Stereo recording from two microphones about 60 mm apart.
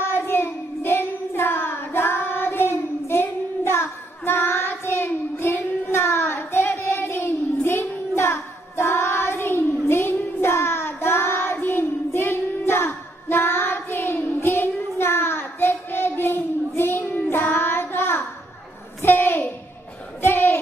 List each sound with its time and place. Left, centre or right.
0.0 s child singing: left
19.0 s a sound: left
20.2 s child singing: left